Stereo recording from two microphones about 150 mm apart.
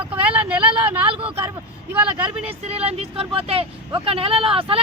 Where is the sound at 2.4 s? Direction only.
40° right (ahead or behind).